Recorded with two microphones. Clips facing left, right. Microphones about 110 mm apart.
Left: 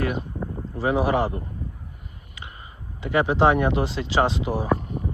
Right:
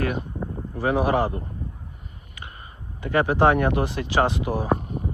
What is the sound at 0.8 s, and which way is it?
Speech, 20° left (ahead or behind).